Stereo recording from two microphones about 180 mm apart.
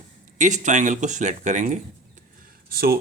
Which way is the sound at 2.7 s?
60° right (ahead or behind).